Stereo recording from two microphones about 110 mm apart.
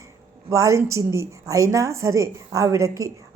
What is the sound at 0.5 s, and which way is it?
A woman's voice, 30° right (ahead or behind).